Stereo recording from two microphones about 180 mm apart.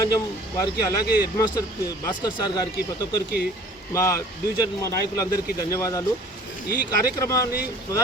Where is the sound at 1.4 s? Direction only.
20° left (ahead or behind).